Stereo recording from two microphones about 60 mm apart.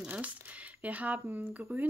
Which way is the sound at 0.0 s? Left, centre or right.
Right.